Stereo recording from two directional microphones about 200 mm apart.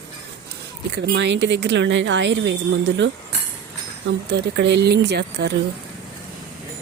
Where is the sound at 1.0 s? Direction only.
60° right (ahead or behind).